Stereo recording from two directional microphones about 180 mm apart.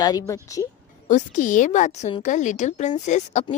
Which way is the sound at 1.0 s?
45° left (ahead or behind).